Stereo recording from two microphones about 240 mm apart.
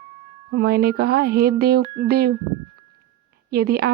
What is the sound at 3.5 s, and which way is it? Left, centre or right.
Speech, right.